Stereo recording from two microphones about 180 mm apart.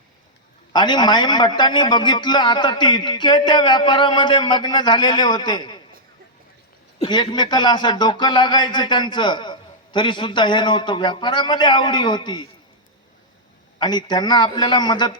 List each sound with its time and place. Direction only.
0.7 s speech: 25° left (ahead or behind)
7.0 s speech: 25° left (ahead or behind)
13.7 s speech: 25° left (ahead or behind)